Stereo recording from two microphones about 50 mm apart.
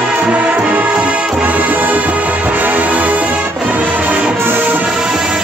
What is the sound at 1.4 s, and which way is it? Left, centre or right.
Music, right.